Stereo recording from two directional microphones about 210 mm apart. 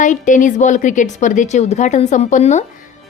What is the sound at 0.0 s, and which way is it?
A woman's voice, 35° left (ahead or behind).